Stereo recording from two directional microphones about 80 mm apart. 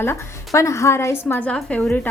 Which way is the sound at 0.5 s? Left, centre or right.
Left.